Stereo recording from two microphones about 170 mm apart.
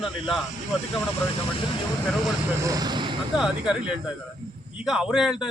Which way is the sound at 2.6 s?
20° right (ahead or behind).